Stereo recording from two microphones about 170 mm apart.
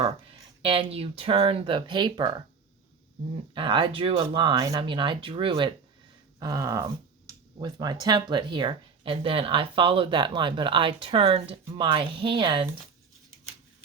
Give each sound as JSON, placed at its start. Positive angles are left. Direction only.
{"t": 0.6, "sound": "speech", "side_deg": -30}
{"t": 3.5, "sound": "speech", "side_deg": -30}